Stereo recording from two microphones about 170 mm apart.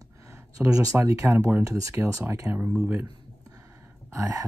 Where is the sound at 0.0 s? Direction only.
15° right (ahead or behind).